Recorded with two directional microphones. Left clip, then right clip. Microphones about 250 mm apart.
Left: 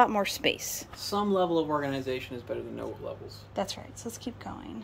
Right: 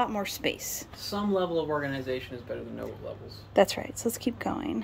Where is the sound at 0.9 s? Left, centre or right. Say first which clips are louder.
Left 2 dB; left.